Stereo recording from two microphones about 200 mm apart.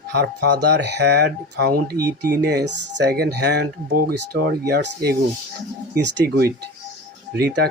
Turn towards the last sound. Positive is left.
turn(degrees=-55)  # may be behind; listen again after turning